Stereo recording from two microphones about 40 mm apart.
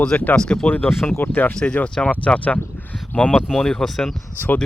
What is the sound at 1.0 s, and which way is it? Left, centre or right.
Speech, left.